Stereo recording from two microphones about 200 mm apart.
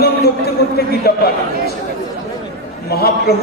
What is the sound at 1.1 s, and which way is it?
Speech, 50° left (ahead or behind).